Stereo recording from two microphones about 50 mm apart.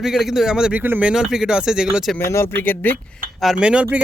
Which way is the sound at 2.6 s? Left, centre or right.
Left.